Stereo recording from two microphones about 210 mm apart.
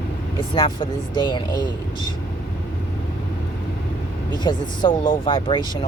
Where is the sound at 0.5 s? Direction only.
25° left (ahead or behind).